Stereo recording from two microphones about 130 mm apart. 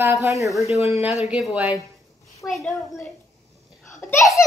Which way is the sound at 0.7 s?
55° left (ahead or behind).